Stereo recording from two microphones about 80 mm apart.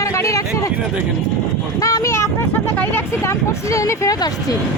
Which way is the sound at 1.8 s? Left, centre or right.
Left.